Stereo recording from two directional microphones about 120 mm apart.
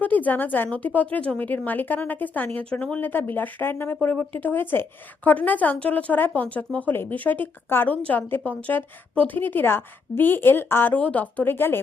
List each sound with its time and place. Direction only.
0.0 s speech: 15° left (ahead or behind)